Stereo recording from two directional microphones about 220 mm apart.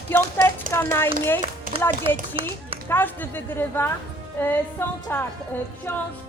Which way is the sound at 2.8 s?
10° left (ahead or behind).